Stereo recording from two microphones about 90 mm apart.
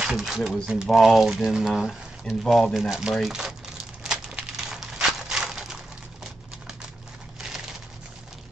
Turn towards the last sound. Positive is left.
turn(degrees=-5)  # may be behind; listen again after turning